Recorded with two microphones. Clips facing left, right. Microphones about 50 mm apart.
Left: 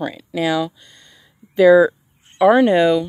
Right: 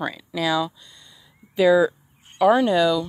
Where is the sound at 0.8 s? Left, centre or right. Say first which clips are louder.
Left 2 dB; left.